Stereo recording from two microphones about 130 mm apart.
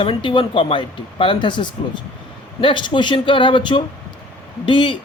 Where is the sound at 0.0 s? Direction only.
40° left (ahead or behind).